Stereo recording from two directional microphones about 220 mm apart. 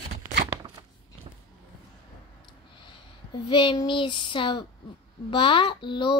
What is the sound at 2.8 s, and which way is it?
A child's voice, 20° left (ahead or behind).